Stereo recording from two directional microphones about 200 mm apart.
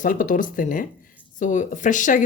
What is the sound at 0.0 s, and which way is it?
Speech, 40° left (ahead or behind).